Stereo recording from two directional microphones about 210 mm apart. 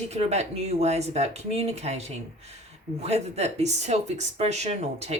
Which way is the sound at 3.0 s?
30° right (ahead or behind).